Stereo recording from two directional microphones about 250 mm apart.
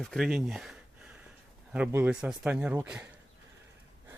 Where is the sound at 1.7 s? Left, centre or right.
Centre.